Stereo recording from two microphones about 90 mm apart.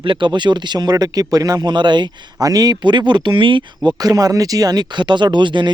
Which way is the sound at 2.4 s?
45° right (ahead or behind).